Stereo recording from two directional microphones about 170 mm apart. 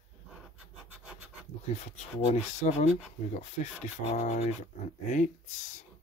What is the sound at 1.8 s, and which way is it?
Speech, 40° left (ahead or behind).